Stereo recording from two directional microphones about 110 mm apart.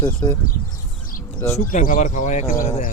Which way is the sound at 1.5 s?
90° left.